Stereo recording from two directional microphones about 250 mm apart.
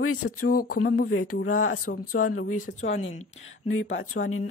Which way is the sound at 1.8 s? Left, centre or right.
Left.